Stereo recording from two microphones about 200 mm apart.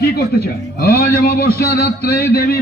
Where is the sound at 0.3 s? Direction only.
50° left (ahead or behind).